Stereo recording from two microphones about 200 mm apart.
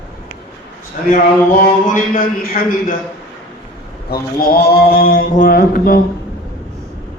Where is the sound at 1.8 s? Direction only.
45° left (ahead or behind).